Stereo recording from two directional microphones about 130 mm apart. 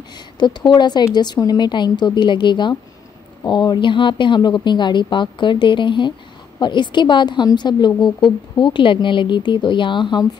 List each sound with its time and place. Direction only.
0.4 s a woman's voice: 35° left (ahead or behind)